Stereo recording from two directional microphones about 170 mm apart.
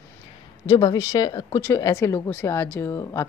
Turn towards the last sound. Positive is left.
turn(degrees=20)  # may be behind; listen again after turning